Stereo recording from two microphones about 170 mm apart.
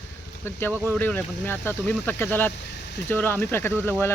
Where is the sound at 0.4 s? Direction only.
15° left (ahead or behind).